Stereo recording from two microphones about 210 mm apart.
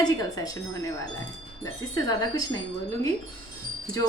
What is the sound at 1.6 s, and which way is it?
Speech, 15° left (ahead or behind).